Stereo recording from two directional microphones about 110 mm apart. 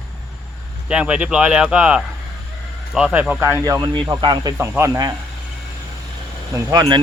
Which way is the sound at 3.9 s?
45° right (ahead or behind).